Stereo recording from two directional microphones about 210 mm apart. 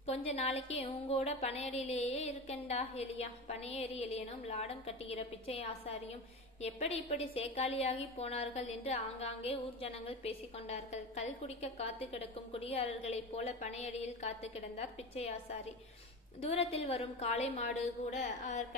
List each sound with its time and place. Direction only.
0.0 s a woman's voice: 30° left (ahead or behind)
16.4 s a woman's voice: 30° left (ahead or behind)